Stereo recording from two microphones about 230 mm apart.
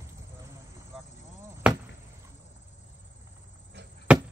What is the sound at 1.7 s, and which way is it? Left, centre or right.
Chop, centre.